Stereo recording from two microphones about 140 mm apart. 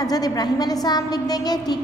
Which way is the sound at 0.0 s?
25° left (ahead or behind).